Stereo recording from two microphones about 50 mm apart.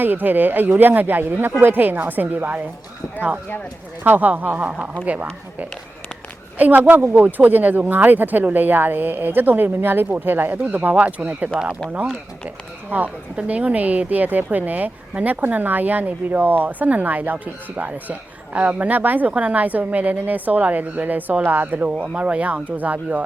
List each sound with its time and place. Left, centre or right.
0.0 s a woman's voice: right
10.7 s speech: right
12.9 s a woman's voice: right